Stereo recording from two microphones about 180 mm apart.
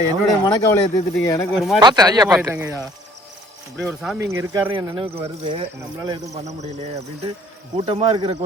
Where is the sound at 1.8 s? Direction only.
20° right (ahead or behind).